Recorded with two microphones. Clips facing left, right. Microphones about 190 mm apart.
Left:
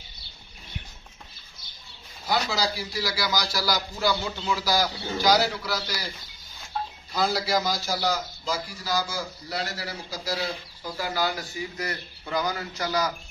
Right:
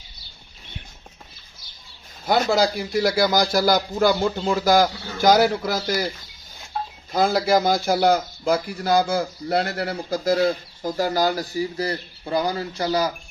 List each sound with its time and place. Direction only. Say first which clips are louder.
2.2 s a man's voice: right 7 dB; 50° right (ahead or behind)
7.1 s a man's voice: right 7 dB; 50° right (ahead or behind); by 13.1 s 30° right (ahead or behind)